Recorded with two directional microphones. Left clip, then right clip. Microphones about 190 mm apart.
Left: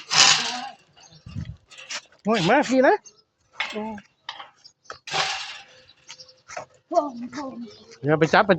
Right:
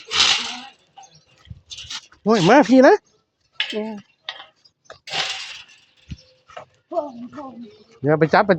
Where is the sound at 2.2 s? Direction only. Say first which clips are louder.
Right 6 dB; 50° right (ahead or behind).